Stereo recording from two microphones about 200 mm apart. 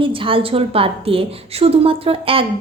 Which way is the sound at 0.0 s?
25° right (ahead or behind).